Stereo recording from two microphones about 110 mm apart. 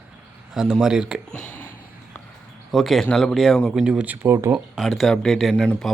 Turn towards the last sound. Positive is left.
turn(degrees=0)  # may be behind; listen again after turning